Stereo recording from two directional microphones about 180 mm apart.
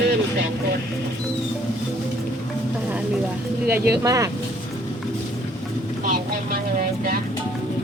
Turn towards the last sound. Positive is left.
turn(degrees=-50)  # may be behind; listen again after turning